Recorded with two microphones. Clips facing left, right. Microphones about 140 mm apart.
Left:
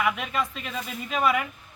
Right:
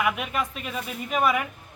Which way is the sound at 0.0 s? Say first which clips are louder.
Even; 5° right (ahead or behind).